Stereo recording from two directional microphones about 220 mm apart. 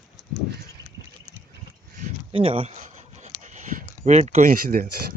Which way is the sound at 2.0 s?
25° right (ahead or behind).